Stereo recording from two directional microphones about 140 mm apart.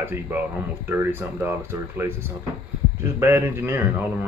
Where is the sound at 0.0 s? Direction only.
15° right (ahead or behind).